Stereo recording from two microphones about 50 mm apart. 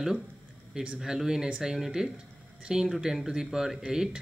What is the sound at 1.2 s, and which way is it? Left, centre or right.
Speech, centre.